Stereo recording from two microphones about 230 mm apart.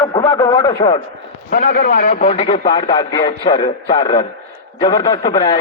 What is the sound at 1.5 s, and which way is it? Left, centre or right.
A man's voice, left.